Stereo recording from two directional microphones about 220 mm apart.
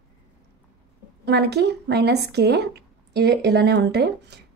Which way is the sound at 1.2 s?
50° right (ahead or behind).